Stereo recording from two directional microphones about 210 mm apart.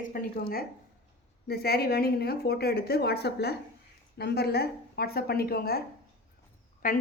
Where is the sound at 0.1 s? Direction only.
45° left (ahead or behind).